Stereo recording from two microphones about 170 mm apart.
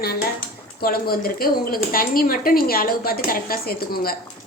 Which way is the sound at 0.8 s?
60° left (ahead or behind).